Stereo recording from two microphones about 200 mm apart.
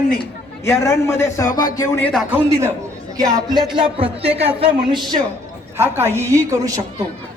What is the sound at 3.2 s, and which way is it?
Speech, 20° right (ahead or behind).